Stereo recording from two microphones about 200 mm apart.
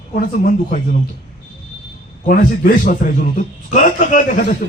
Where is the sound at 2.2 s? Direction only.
45° left (ahead or behind).